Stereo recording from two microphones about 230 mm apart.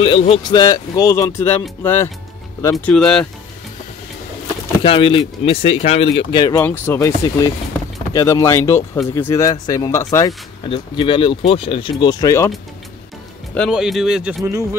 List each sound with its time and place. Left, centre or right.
0.0 s speech: left; by 3.3 s centre
4.8 s speech: left
13.6 s speech: centre